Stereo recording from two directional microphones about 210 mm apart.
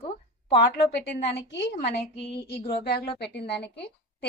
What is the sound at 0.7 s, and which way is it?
A woman's voice, 55° left (ahead or behind).